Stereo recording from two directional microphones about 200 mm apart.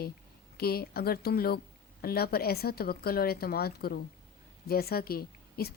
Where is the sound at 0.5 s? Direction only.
50° left (ahead or behind).